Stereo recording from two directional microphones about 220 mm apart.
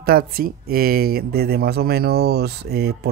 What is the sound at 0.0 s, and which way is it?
Speech, 45° right (ahead or behind).